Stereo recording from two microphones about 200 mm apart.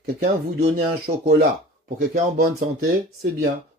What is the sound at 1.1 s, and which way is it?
Speech, 30° right (ahead or behind).